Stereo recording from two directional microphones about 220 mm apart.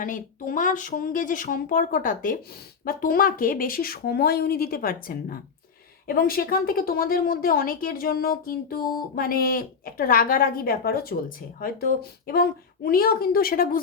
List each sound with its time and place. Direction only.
0.0 s a woman's voice: 35° left (ahead or behind)